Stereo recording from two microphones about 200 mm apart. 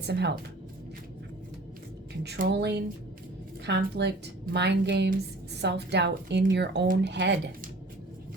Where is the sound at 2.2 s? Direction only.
55° right (ahead or behind).